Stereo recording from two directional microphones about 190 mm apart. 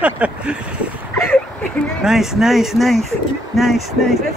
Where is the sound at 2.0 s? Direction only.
Centre (ahead or behind).